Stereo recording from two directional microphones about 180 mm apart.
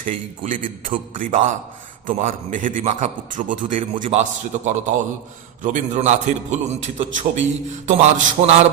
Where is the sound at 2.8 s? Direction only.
40° right (ahead or behind).